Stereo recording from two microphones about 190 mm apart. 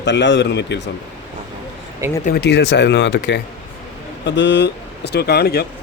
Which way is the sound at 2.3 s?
60° left (ahead or behind).